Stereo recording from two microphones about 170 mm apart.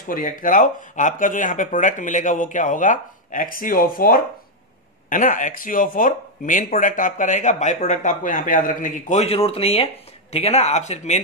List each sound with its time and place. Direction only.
0.0 s speech: 55° left (ahead or behind)